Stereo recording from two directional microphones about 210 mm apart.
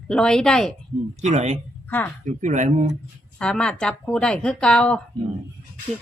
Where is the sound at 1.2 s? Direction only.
35° right (ahead or behind).